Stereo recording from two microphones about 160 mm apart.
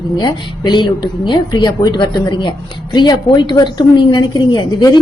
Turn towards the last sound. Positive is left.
turn(degrees=25)  # may be behind; listen again after turning